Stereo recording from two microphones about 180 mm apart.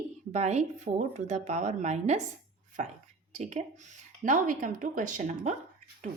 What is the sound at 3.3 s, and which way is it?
Speech, 40° right (ahead or behind).